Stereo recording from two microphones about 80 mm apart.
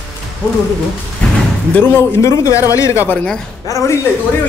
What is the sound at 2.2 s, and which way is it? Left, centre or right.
Speech, left.